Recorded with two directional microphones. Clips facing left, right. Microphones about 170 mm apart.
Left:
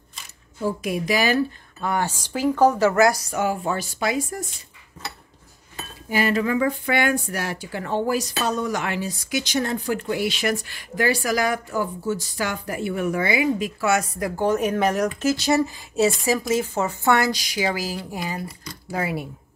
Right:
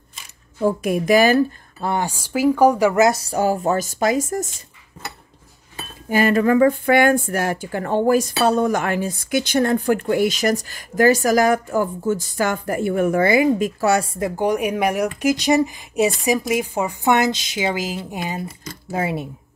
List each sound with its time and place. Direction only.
0.6 s speech: 50° right (ahead or behind)
2.0 s speech: 10° right (ahead or behind); by 4.6 s 45° right (ahead or behind)
6.0 s speech: 50° right (ahead or behind); by 14.3 s 25° right (ahead or behind)
14.4 s speech: 15° right (ahead or behind)